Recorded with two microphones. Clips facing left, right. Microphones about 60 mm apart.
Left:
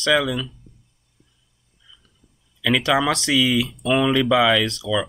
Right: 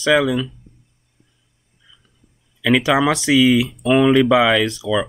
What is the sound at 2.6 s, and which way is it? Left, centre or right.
Speech, centre.